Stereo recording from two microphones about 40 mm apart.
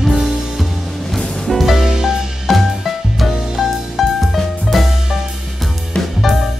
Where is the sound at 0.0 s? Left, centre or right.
Centre.